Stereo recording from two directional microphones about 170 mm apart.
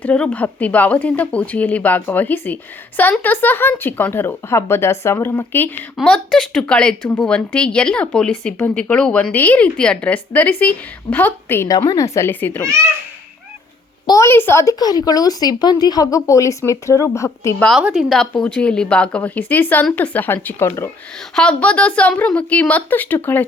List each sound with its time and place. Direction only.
0.0 s speech: 10° left (ahead or behind)
14.1 s speech: 15° left (ahead or behind)
17.7 s speech: centre (ahead or behind)